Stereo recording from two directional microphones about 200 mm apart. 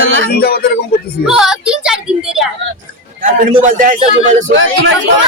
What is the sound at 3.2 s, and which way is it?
Speech, 40° right (ahead or behind).